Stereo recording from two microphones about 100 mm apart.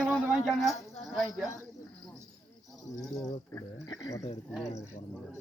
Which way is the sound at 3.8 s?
40° left (ahead or behind).